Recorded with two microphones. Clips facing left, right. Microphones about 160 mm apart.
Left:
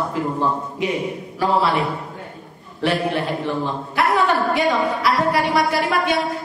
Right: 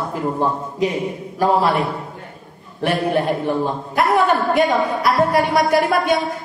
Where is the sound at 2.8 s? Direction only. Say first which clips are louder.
Right 2 dB; 45° right (ahead or behind).